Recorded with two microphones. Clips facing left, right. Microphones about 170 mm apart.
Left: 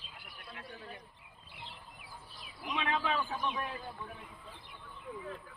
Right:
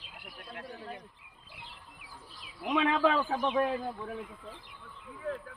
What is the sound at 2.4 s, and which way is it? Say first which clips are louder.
Speech: right 9 dB; 90° right.